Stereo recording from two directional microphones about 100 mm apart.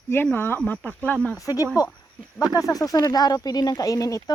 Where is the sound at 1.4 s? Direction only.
35° left (ahead or behind).